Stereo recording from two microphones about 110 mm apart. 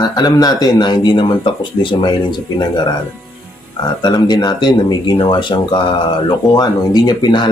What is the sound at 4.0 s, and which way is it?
A man's voice, 40° left (ahead or behind).